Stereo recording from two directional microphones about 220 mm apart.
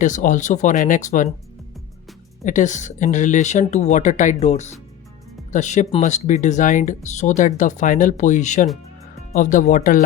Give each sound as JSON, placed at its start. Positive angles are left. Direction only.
{"t": 0.0, "sound": "speech", "side_deg": 35}
{"t": 2.4, "sound": "speech", "side_deg": 35}